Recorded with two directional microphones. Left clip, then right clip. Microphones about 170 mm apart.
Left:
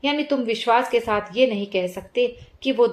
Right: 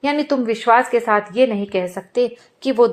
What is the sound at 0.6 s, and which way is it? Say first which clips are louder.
Speech: right 5 dB; 20° right (ahead or behind).